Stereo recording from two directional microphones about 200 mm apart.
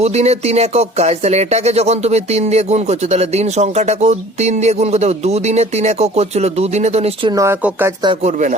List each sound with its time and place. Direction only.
0.0 s speech: 30° right (ahead or behind); by 7.9 s 10° right (ahead or behind)
8.0 s speech: 30° right (ahead or behind)